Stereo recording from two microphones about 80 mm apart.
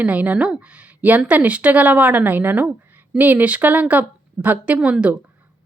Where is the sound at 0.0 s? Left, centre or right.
Centre.